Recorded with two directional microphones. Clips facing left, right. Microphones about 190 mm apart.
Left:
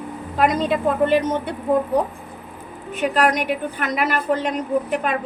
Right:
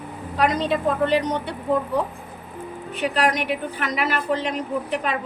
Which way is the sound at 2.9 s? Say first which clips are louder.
Left 3 dB; 50° left (ahead or behind).